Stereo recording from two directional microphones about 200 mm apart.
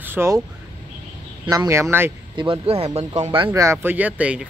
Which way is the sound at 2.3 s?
25° right (ahead or behind).